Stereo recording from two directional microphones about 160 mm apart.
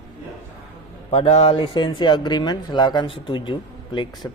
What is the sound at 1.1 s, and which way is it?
Speech, 40° left (ahead or behind).